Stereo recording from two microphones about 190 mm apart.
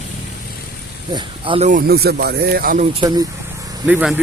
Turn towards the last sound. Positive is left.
turn(degrees=-5)  # may be behind; listen again after turning